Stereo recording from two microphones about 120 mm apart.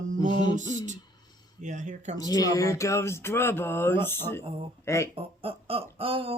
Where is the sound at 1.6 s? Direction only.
90° right.